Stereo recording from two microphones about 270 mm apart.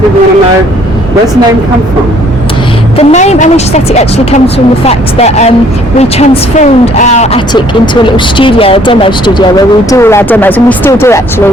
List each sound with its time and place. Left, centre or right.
3.0 s speech: left; by 11.4 s centre